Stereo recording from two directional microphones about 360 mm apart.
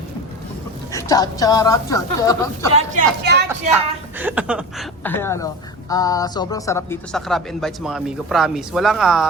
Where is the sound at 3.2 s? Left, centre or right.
Right.